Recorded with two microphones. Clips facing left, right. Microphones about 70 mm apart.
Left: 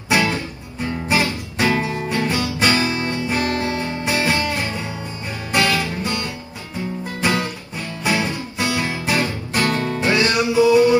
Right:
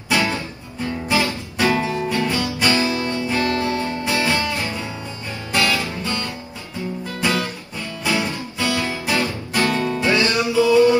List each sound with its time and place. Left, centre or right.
0.7 s guitar: left
4.5 s music: left
8.0 s guitar: left
10.5 s music: left